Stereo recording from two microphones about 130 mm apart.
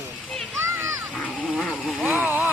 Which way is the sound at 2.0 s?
15° right (ahead or behind).